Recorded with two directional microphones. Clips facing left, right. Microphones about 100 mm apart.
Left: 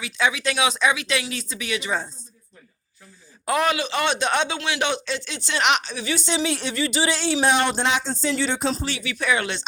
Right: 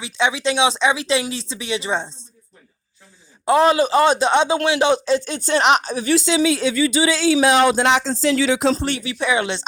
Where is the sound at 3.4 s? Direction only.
30° right (ahead or behind).